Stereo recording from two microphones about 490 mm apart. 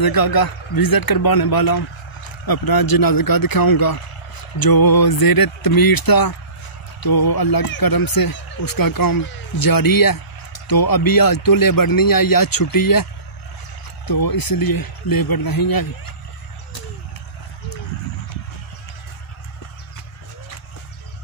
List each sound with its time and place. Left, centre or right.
0.0 s speech: left